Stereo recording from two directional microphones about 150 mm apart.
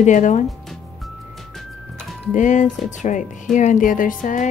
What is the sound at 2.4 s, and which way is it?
Speech, 55° left (ahead or behind).